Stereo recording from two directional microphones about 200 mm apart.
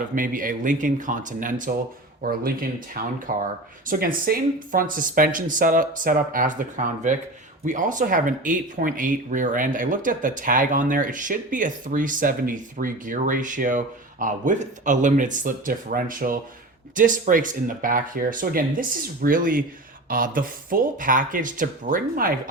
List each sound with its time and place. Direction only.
0.2 s speech: 40° right (ahead or behind)